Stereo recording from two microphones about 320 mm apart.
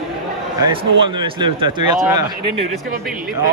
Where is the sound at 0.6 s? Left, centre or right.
Centre.